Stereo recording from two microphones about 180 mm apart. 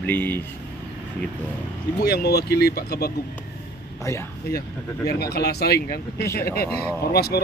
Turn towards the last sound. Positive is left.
turn(degrees=60)  # may be behind; listen again after turning